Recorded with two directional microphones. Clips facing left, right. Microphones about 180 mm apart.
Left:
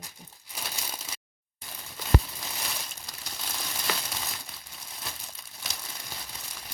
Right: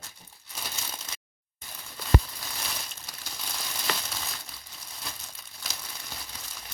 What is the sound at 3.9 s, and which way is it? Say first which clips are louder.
Crumpling: even; 5° left (ahead or behind).